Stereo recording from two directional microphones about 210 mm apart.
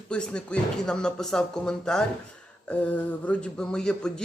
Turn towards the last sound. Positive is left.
turn(degrees=5)  # may be behind; listen again after turning